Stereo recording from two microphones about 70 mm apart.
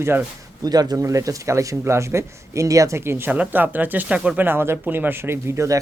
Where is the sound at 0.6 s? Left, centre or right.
Right.